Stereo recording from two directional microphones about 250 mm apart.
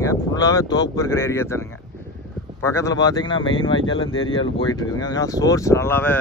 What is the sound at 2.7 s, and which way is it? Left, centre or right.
Speech, centre.